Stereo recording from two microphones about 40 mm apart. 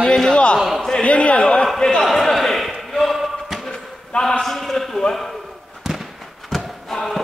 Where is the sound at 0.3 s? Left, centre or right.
Left.